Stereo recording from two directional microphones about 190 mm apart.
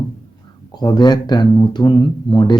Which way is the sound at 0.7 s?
20° left (ahead or behind).